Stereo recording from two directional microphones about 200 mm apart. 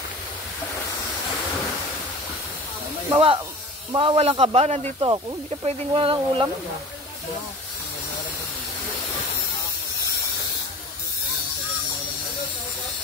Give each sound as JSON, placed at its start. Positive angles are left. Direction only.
{"t": 3.1, "sound": "speech", "side_deg": -25}